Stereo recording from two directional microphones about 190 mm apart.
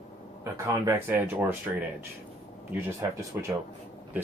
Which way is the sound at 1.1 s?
10° right (ahead or behind).